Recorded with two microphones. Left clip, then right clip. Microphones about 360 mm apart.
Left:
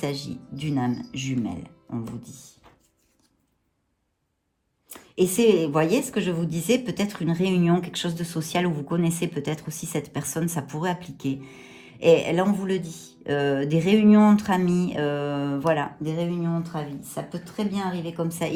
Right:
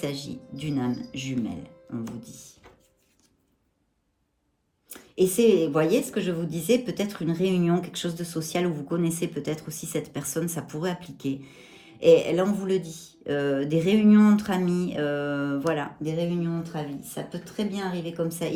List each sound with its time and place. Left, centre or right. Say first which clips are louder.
0.0 s a woman's voice: left 2 dB; centre
4.9 s a woman's voice: even; centre